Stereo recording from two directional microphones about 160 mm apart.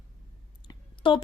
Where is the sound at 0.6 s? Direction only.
30° left (ahead or behind).